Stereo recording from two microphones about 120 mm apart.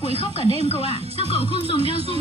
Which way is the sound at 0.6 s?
60° left (ahead or behind).